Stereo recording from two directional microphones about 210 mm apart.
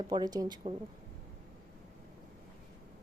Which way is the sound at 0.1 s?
20° right (ahead or behind).